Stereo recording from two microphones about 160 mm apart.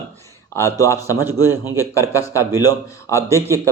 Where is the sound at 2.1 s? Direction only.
20° left (ahead or behind).